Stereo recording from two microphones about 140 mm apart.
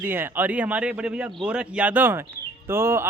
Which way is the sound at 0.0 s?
15° right (ahead or behind).